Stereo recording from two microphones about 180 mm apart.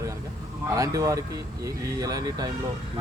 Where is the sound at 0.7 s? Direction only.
20° right (ahead or behind).